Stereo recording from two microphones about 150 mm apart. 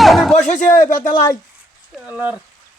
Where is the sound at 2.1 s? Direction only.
10° right (ahead or behind).